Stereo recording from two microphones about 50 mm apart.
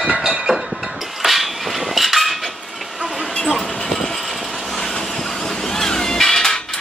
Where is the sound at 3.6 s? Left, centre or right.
Centre.